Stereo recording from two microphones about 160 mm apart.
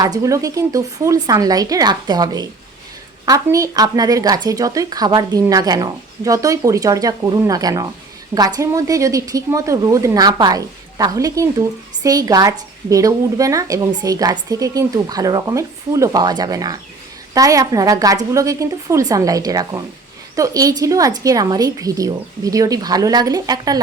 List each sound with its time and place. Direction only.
0.0 s a woman's voice: 20° right (ahead or behind)